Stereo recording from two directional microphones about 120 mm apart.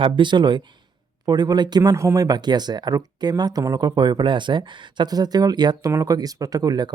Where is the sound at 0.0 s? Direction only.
40° right (ahead or behind).